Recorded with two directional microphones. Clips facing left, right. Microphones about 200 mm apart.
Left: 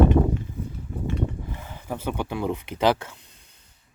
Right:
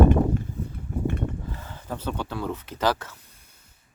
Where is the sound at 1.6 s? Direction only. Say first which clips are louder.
Left 2 dB; 15° left (ahead or behind).